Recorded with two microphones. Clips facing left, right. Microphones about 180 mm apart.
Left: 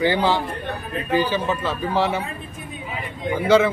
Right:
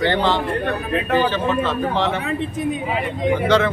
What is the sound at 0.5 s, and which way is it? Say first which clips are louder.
Speech: right 7 dB; 90° right.